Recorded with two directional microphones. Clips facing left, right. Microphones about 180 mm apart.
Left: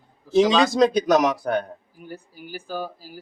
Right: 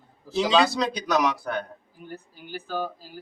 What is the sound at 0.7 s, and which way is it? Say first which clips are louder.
Speech: left 8 dB; 50° left (ahead or behind).